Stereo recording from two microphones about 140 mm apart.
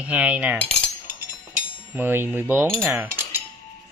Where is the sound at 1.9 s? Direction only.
15° right (ahead or behind).